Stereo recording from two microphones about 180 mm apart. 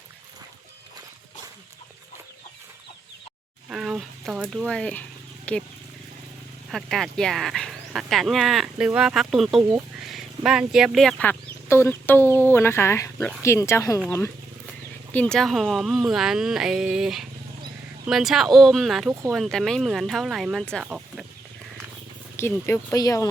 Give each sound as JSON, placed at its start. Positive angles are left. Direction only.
{"t": 3.7, "sound": "speech", "side_deg": -5}
{"t": 6.7, "sound": "speech", "side_deg": 0}
{"t": 15.1, "sound": "speech", "side_deg": 5}
{"t": 22.4, "sound": "speech", "side_deg": 15}